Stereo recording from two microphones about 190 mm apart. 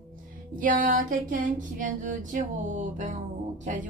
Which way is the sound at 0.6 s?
45° right (ahead or behind).